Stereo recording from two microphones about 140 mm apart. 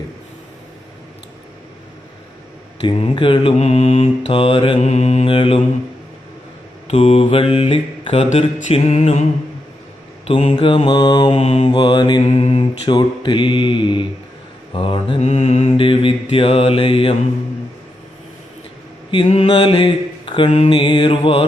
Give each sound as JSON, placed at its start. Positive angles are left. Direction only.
{"t": 2.9, "sound": "mantra", "side_deg": 45}
{"t": 4.9, "sound": "mantra", "side_deg": 55}
{"t": 5.3, "sound": "mantra", "side_deg": 40}
{"t": 6.8, "sound": "mantra", "side_deg": 45}
{"t": 10.2, "sound": "mantra", "side_deg": 45}
{"t": 11.7, "sound": "mantra", "side_deg": 35}
{"t": 12.2, "sound": "mantra", "side_deg": 50}
{"t": 12.9, "sound": "mantra", "side_deg": 35}
{"t": 15.2, "sound": "mantra", "side_deg": 50}
{"t": 19.5, "sound": "mantra", "side_deg": 35}